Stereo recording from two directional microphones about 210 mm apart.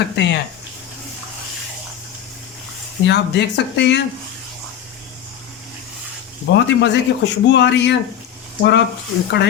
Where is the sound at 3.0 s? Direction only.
55° left (ahead or behind).